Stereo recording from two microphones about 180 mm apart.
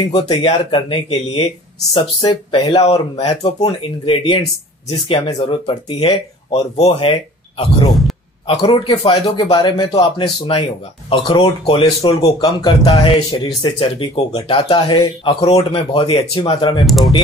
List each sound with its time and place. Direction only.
0.1 s speech: 25° left (ahead or behind)
7.9 s a sound: centre (ahead or behind)
8.5 s speech: 30° left (ahead or behind)
16.8 s speech: centre (ahead or behind)